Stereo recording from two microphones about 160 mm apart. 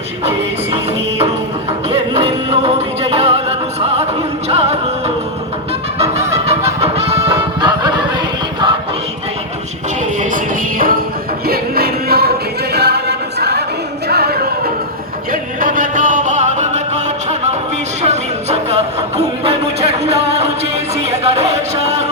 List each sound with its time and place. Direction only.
2.1 s music: 40° right (ahead or behind)
4.4 s music: 40° right (ahead or behind)
10.2 s music: 60° right (ahead or behind)
11.4 s music: 70° right (ahead or behind)
12.7 s choir: 90° right
14.1 s a sound: 80° right
15.3 s music: 60° right (ahead or behind)